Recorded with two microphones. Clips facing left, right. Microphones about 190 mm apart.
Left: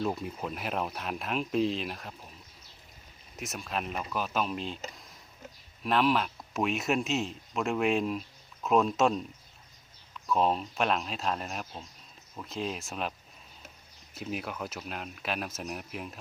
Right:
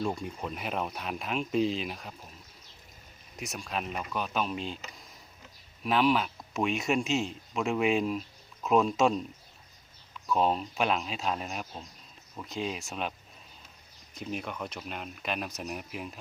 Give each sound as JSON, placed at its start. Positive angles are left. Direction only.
{"t": 0.0, "sound": "speech", "side_deg": 5}
{"t": 3.3, "sound": "speech", "side_deg": 0}
{"t": 5.8, "sound": "speech", "side_deg": 0}
{"t": 10.2, "sound": "speech", "side_deg": 0}
{"t": 14.2, "sound": "speech", "side_deg": 5}